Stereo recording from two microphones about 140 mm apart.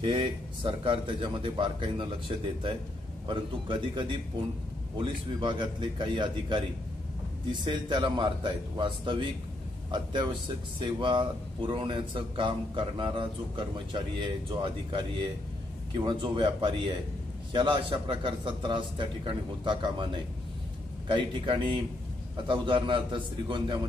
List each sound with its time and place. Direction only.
0.0 s speech: 35° right (ahead or behind)
7.6 s speech: 35° right (ahead or behind)